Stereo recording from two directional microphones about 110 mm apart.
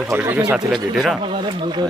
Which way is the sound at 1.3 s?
45° right (ahead or behind).